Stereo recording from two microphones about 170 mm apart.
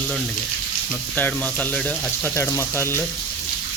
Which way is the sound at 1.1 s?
10° left (ahead or behind).